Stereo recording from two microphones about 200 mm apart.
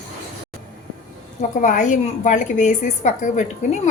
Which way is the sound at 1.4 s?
40° left (ahead or behind).